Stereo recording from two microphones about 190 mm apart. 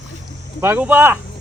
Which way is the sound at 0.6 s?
10° right (ahead or behind).